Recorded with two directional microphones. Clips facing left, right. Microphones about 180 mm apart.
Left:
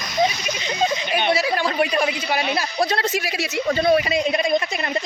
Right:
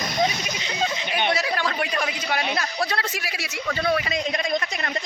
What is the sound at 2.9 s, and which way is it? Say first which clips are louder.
A woman's voice: left 6 dB; 20° left (ahead or behind).